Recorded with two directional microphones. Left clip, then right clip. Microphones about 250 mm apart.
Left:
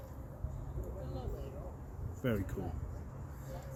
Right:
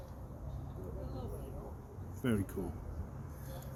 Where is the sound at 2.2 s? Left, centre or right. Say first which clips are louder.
Even; centre.